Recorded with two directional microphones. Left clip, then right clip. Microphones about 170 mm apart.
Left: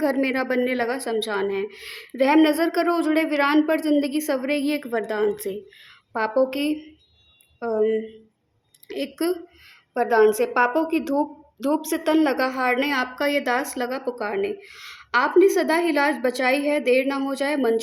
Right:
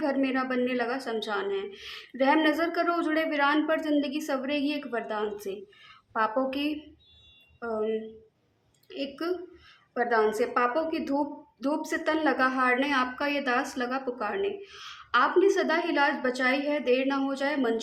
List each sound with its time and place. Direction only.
0.0 s a woman's voice: 35° left (ahead or behind)